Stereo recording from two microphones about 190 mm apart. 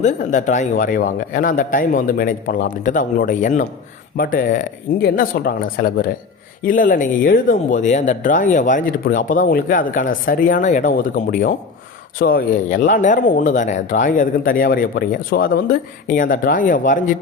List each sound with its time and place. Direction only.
0.0 s speech: 40° left (ahead or behind)